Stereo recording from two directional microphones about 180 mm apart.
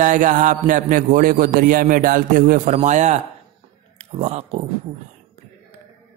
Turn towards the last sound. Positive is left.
turn(degrees=-35)  # may be behind; listen again after turning